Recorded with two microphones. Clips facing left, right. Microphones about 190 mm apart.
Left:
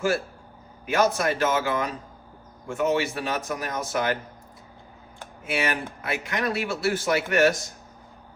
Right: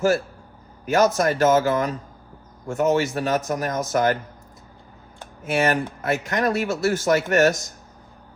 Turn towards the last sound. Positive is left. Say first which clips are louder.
# right 3 dB
turn(degrees=-45)  # may be behind; listen again after turning